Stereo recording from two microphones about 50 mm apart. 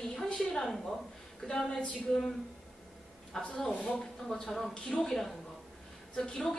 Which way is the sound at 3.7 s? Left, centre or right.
Left.